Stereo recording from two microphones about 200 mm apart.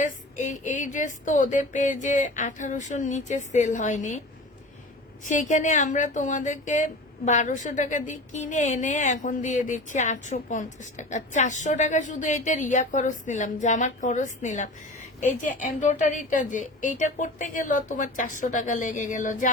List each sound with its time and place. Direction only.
0.0 s speech: 40° left (ahead or behind)
5.2 s speech: 40° left (ahead or behind)